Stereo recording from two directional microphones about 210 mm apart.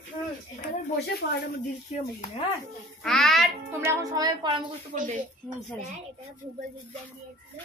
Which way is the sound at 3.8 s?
15° right (ahead or behind).